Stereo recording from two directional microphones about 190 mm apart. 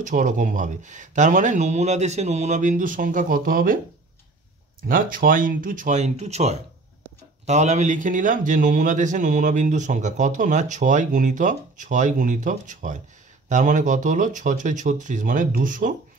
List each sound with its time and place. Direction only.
0.0 s a man's voice: 45° right (ahead or behind)
4.8 s a man's voice: 50° right (ahead or behind)